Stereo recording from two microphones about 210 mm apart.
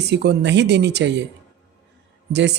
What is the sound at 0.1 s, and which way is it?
Speech, 55° right (ahead or behind).